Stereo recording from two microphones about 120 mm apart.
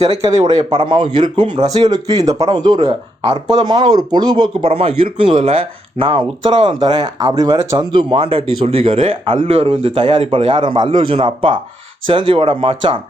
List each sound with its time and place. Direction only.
0.2 s speech: 30° right (ahead or behind)